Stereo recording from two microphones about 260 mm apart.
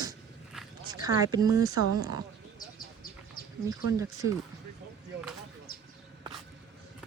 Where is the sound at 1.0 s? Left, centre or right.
Centre.